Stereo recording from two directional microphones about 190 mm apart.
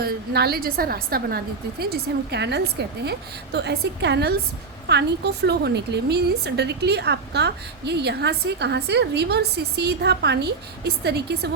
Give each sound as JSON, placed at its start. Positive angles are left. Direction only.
{"t": 0.0, "sound": "a woman's voice", "side_deg": -55}